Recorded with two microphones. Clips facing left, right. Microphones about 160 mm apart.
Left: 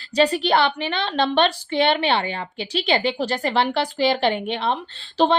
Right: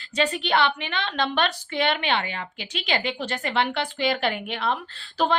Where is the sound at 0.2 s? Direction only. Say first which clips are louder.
Left 5 dB; 35° left (ahead or behind).